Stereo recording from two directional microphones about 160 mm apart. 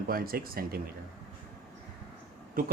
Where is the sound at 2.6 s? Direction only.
60° right (ahead or behind).